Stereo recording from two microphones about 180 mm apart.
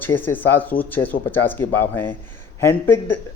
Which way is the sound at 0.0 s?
10° left (ahead or behind).